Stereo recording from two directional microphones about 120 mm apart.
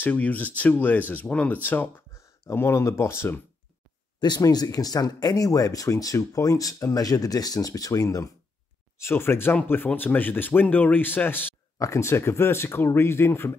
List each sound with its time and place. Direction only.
0.0 s speech: 15° left (ahead or behind)
4.2 s speech: 35° left (ahead or behind)